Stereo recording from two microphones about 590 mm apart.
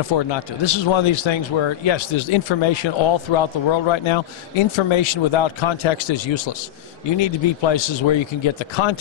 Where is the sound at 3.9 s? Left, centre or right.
Left.